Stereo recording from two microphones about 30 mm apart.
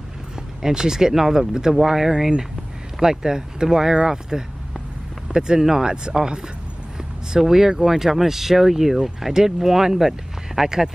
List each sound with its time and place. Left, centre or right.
0.6 s speech: centre
7.0 s speech: centre